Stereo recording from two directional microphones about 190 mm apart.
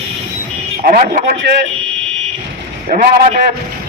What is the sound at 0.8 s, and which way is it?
Speech, 45° right (ahead or behind).